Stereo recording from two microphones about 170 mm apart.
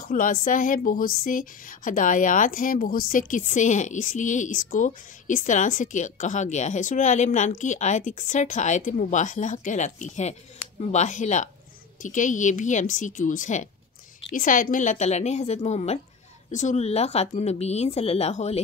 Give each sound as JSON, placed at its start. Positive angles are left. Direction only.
{"t": 0.0, "sound": "speech", "side_deg": 55}